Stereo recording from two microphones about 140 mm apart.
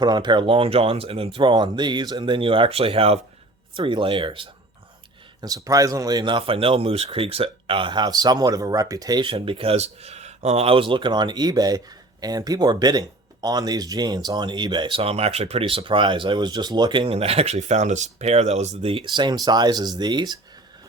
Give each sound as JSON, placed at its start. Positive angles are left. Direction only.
{"t": 0.0, "sound": "speech", "side_deg": -30}
{"t": 5.4, "sound": "speech", "side_deg": -25}